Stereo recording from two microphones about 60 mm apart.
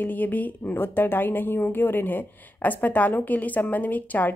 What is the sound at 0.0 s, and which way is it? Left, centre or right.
A woman's voice, left.